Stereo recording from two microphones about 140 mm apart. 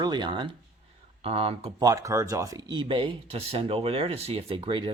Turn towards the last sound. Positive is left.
turn(degrees=-35)  # may be behind; listen again after turning